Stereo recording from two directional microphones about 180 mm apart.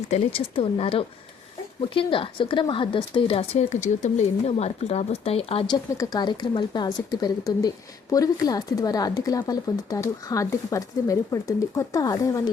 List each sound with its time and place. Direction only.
0.1 s speech: 30° left (ahead or behind)